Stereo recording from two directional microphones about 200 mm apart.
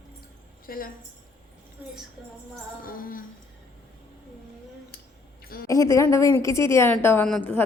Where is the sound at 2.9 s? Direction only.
45° left (ahead or behind).